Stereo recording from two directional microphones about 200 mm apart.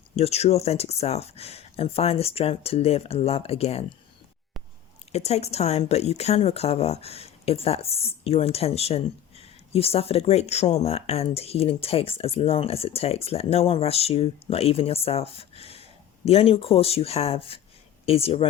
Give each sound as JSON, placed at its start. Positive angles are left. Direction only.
{"t": 0.2, "sound": "speech", "side_deg": 30}
{"t": 5.1, "sound": "speech", "side_deg": 30}